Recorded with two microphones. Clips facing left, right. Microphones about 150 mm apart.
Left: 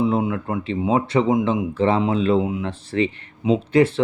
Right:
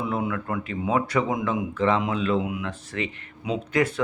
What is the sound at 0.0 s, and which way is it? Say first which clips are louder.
Speech: left 7 dB; 25° left (ahead or behind).